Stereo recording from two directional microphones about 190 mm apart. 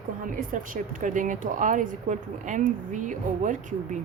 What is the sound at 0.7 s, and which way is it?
Speech, 45° right (ahead or behind).